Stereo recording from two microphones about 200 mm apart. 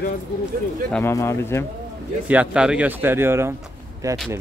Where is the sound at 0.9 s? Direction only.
5° left (ahead or behind).